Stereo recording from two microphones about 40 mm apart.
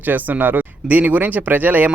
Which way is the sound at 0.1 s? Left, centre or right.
Right.